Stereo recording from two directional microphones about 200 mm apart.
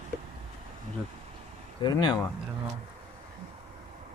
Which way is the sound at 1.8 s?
20° left (ahead or behind).